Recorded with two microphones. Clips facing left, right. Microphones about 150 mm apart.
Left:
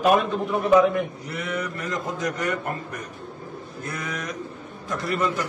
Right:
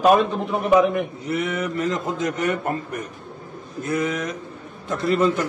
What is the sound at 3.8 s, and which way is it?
Speech, 20° right (ahead or behind).